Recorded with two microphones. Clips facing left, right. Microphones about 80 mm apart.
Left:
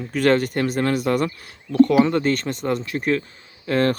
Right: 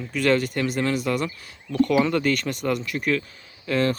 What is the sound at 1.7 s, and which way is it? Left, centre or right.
Speech, left.